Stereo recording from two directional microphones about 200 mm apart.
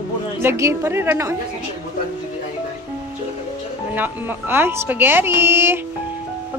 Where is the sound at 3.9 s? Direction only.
10° right (ahead or behind).